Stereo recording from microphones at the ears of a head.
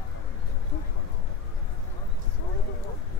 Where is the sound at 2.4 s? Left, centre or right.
Left.